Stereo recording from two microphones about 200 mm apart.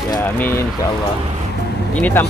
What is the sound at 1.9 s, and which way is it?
Speech, 10° left (ahead or behind).